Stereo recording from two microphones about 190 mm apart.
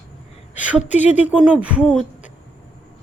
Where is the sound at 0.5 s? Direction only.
5° right (ahead or behind).